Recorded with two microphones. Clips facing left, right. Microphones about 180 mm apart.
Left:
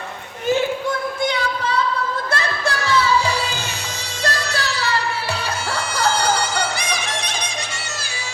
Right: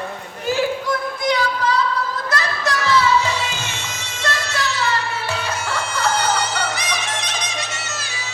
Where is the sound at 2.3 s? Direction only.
30° left (ahead or behind).